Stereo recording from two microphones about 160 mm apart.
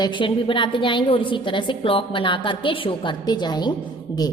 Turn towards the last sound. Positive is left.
turn(degrees=25)  # may be behind; listen again after turning